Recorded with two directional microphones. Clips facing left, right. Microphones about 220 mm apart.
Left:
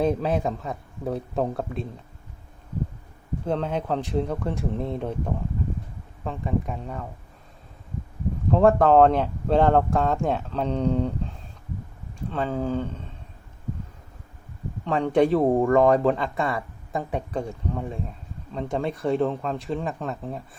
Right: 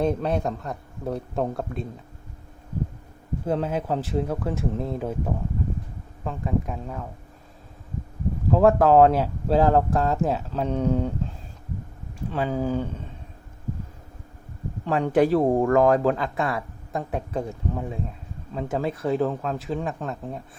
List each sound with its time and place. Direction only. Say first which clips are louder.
0.0 s speech: left 1 dB; centre (ahead or behind)
3.4 s speech: right 1 dB; 5° right (ahead or behind)
8.4 s speech: even; centre (ahead or behind)
12.3 s speech: right 1 dB; 10° right (ahead or behind)
14.8 s speech: even; 5° right (ahead or behind)